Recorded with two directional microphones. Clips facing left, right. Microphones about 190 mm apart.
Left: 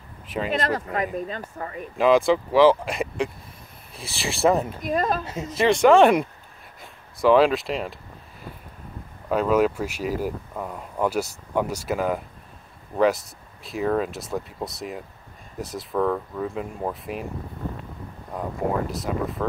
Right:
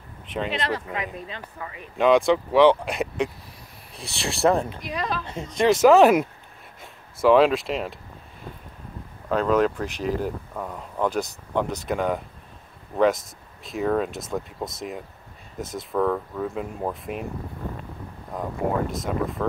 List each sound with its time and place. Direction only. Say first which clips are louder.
0.5 s speech: left 5 dB; 45° left (ahead or behind)
2.0 s speech: even; centre (ahead or behind)
4.8 s speech: left 5 dB; 50° left (ahead or behind)
5.2 s speech: even; 5° left (ahead or behind)
9.3 s speech: left 1 dB; 10° left (ahead or behind)
18.9 s speech: even; centre (ahead or behind)